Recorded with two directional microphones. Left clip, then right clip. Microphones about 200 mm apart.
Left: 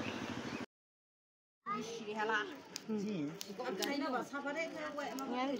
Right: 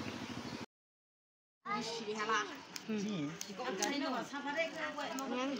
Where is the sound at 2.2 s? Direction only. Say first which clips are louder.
Even; 40° left (ahead or behind).